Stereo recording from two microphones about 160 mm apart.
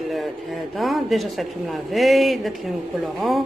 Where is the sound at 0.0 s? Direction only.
Centre (ahead or behind).